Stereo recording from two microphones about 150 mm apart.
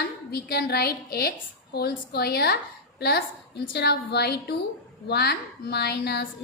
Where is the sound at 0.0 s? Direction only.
90° left.